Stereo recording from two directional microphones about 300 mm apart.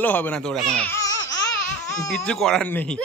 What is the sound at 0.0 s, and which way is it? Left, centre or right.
Speech, centre.